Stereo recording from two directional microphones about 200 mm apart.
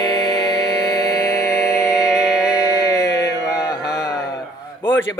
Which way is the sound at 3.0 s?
60° left (ahead or behind).